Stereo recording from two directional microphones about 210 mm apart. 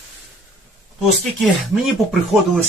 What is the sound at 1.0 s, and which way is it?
Speech, centre (ahead or behind).